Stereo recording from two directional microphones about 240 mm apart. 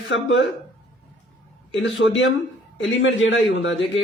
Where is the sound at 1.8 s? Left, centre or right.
Left.